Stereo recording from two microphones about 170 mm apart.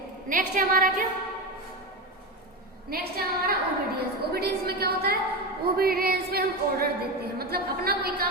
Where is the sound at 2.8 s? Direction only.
65° right (ahead or behind).